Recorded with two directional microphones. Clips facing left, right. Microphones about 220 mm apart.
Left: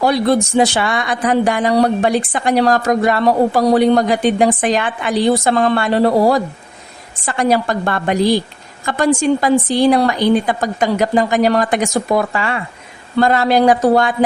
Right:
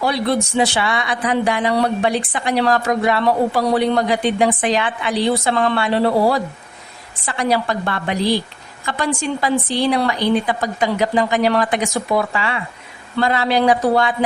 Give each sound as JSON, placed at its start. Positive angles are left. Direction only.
{"t": 0.0, "sound": "speech", "side_deg": 45}